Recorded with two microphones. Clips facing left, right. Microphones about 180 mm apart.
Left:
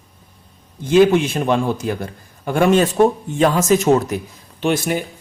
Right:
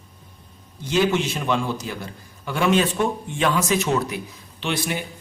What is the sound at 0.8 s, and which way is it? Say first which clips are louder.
A man's voice: left 8 dB; 50° left (ahead or behind).